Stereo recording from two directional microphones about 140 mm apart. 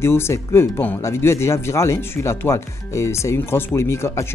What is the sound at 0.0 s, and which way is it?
Speech, 20° left (ahead or behind).